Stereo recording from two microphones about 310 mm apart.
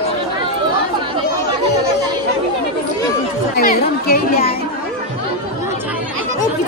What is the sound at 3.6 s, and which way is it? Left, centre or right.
Children playing, left.